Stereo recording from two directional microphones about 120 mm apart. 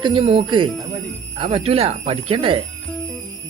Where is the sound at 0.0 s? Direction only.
50° right (ahead or behind).